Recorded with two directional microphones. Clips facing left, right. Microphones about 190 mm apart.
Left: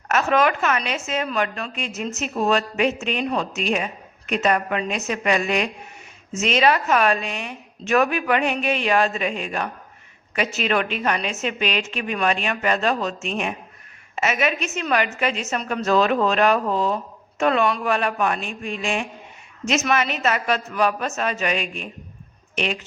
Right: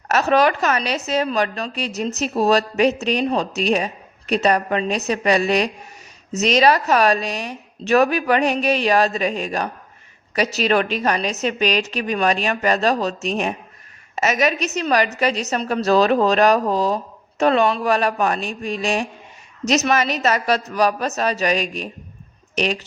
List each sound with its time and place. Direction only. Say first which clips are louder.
0.1 s a woman's voice: right 3 dB; 35° right (ahead or behind)